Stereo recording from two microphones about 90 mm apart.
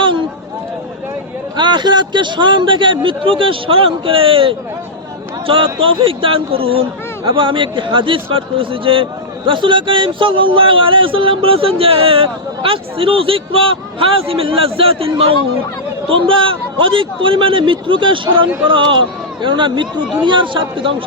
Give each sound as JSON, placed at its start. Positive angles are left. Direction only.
{"t": 1.5, "sound": "a man's voice", "side_deg": -55}
{"t": 5.5, "sound": "speech", "side_deg": -75}
{"t": 7.3, "sound": "a man's voice", "side_deg": -70}
{"t": 9.5, "sound": "a man's voice", "side_deg": -65}
{"t": 16.0, "sound": "a man's voice", "side_deg": -75}